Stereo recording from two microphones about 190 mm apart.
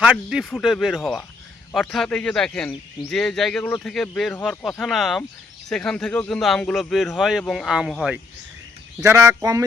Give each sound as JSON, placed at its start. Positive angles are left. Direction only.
{"t": 0.0, "sound": "speech", "side_deg": -5}
{"t": 9.0, "sound": "speech", "side_deg": -15}